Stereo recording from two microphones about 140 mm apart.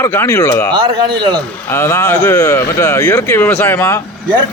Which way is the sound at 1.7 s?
20° left (ahead or behind).